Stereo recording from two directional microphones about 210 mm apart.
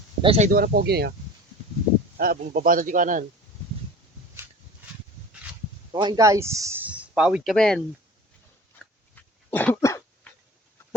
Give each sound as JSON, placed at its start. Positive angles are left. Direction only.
{"t": 0.2, "sound": "speech", "side_deg": -30}
{"t": 2.1, "sound": "speech", "side_deg": -45}
{"t": 5.9, "sound": "speech", "side_deg": -20}
{"t": 9.1, "sound": "cough", "side_deg": 10}